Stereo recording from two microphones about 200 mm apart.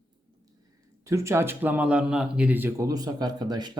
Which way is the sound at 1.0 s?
15° right (ahead or behind).